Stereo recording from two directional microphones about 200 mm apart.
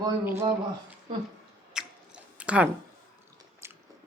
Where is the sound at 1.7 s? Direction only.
5° right (ahead or behind).